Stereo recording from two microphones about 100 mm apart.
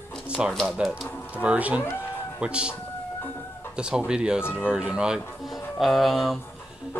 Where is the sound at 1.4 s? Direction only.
15° right (ahead or behind).